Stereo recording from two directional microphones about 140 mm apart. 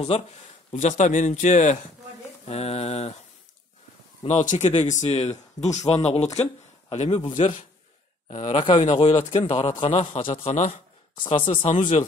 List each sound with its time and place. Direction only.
0.1 s mantra: 45° left (ahead or behind)
0.7 s speech: 55° left (ahead or behind)
2.4 s mantra: 50° left (ahead or behind)
4.2 s speech: 55° left (ahead or behind)
5.8 s mantra: 50° left (ahead or behind)
6.9 s a man's voice: 45° left (ahead or behind)
7.4 s mantra: 45° left (ahead or behind)
8.3 s speech: 45° left (ahead or behind)
10.3 s speech: 55° left (ahead or behind)
11.1 s speech: 40° left (ahead or behind)